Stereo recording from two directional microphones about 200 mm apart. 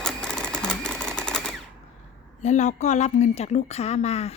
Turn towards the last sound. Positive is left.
turn(degrees=30)  # may be behind; listen again after turning